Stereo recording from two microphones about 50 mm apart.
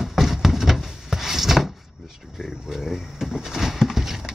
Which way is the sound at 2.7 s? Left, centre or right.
Centre.